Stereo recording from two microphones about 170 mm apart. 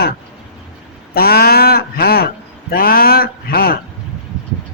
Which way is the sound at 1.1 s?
65° left (ahead or behind).